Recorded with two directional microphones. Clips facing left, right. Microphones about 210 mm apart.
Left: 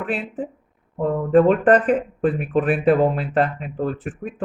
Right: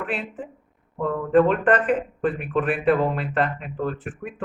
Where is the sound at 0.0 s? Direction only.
40° left (ahead or behind).